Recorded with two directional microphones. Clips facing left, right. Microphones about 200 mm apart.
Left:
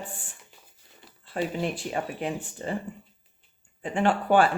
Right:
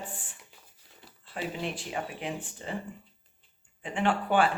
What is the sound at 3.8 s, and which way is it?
Speech, 45° left (ahead or behind).